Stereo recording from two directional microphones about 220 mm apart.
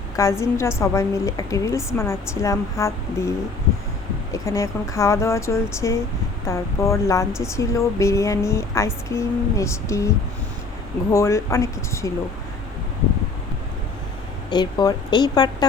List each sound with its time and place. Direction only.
0.2 s speech: 10° left (ahead or behind)
11.1 s speech: 15° left (ahead or behind)
14.5 s a woman's voice: 20° left (ahead or behind)